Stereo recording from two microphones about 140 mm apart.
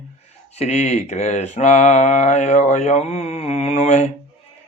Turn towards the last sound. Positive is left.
turn(degrees=55)  # may be behind; listen again after turning